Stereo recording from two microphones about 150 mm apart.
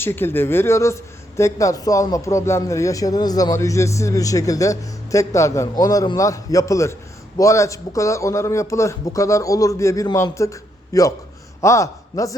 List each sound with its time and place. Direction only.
0.0 s a man's voice: 15° left (ahead or behind)